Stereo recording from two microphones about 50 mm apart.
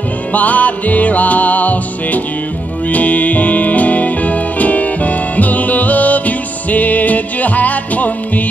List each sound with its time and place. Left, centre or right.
0.3 s music: left